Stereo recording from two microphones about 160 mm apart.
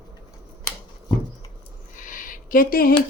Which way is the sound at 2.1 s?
65° left (ahead or behind).